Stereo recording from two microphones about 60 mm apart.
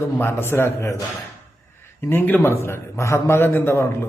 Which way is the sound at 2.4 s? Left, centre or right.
Left.